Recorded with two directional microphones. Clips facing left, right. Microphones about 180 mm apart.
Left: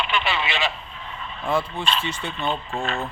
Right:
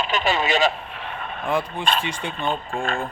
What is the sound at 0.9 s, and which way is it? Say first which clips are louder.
Vehicle: right 4 dB; 70° right (ahead or behind).